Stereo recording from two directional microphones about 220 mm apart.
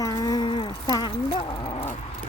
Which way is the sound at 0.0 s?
15° left (ahead or behind).